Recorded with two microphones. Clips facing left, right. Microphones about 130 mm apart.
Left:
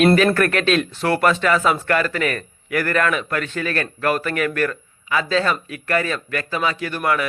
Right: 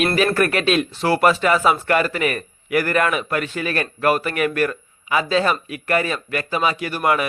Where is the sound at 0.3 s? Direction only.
10° right (ahead or behind).